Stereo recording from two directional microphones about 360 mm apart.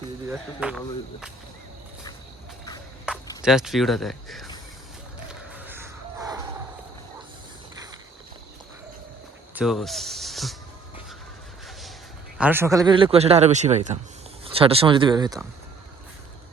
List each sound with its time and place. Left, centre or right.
0.3 s speech: centre
3.1 s speech: centre
5.3 s a sound: centre
9.6 s speech: centre
12.4 s a man's voice: centre